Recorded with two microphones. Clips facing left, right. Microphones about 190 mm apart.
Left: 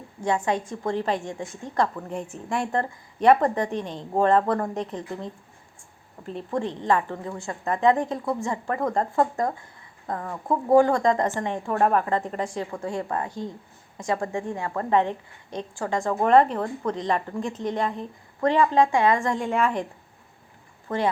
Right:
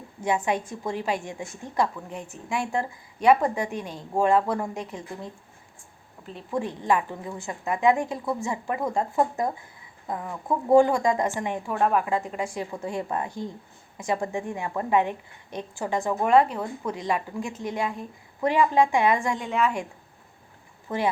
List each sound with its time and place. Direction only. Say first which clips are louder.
0.3 s a woman's voice: left 1 dB; 10° right (ahead or behind)
11.6 s a woman's voice: left 2 dB; centre (ahead or behind)
12.7 s a woman's voice: left 1 dB; 15° right (ahead or behind)
19.4 s a woman's voice: left 2 dB; centre (ahead or behind)